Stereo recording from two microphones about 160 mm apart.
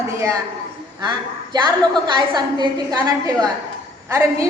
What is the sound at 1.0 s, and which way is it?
A woman's voice, 25° right (ahead or behind).